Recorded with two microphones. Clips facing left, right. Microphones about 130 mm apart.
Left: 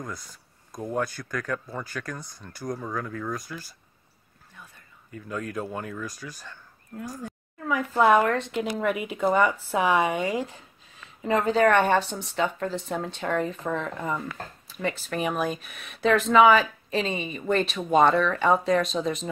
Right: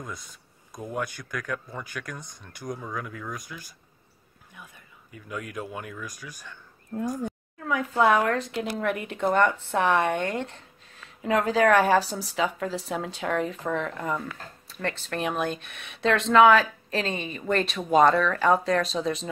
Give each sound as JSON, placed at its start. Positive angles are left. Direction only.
{"t": 0.0, "sound": "speech", "side_deg": -20}
{"t": 3.0, "sound": "speech", "side_deg": -5}
{"t": 4.6, "sound": "speech", "side_deg": -5}
{"t": 7.1, "sound": "speech", "side_deg": -25}
{"t": 7.6, "sound": "speech", "side_deg": 0}